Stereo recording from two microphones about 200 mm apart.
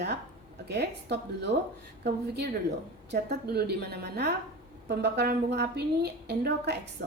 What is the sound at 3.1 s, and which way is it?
A woman's voice, 55° right (ahead or behind).